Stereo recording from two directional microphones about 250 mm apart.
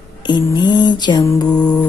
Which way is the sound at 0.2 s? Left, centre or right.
Centre.